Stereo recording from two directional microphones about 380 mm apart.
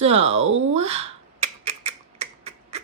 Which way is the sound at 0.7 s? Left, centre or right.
Centre.